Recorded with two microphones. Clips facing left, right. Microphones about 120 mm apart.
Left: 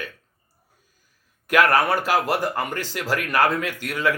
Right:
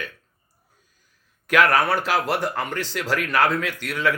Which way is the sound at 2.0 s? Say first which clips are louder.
Left 1 dB; 45° left (ahead or behind).